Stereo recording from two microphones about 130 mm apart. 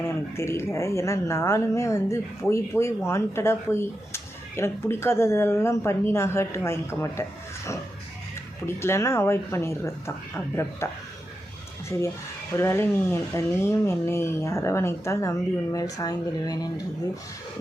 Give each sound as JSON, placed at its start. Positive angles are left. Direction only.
{"t": 0.0, "sound": "speech", "side_deg": 20}
{"t": 11.9, "sound": "speech", "side_deg": 20}